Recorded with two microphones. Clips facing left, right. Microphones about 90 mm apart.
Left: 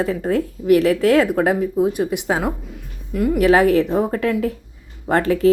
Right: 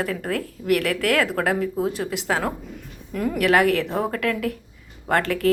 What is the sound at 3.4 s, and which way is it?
Speech, 20° left (ahead or behind).